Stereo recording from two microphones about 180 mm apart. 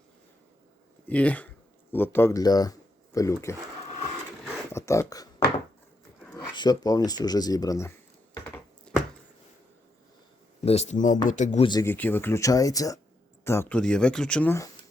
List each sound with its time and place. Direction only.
1.0 s speech: 10° left (ahead or behind)
4.7 s speech: 15° left (ahead or behind)
6.3 s speech: 25° left (ahead or behind)
8.9 s a sound: 5° left (ahead or behind)
10.7 s a man's voice: 40° left (ahead or behind)
11.6 s speech: 25° left (ahead or behind)
11.9 s speech: 10° left (ahead or behind)